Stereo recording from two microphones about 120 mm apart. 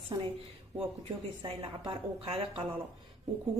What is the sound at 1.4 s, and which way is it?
A woman's voice, 50° right (ahead or behind).